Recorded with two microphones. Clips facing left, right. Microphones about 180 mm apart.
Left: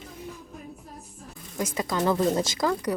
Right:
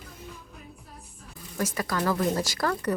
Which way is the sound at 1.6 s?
20° left (ahead or behind).